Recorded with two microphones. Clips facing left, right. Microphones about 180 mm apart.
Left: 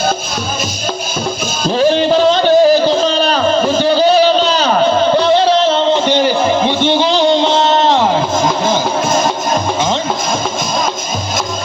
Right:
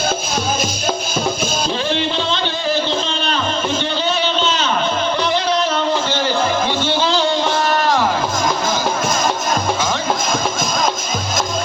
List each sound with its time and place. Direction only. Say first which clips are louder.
1.7 s music: left 14 dB; 40° left (ahead or behind)
6.1 s music: left 6 dB; 15° left (ahead or behind)